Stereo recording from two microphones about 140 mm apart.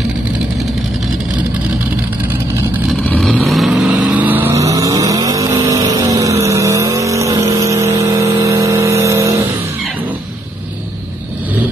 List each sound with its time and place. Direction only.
3.1 s vehicle: centre (ahead or behind); by 9.4 s 20° right (ahead or behind)